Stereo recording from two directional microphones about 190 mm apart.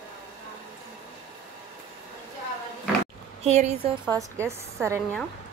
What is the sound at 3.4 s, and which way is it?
Speech, 35° right (ahead or behind).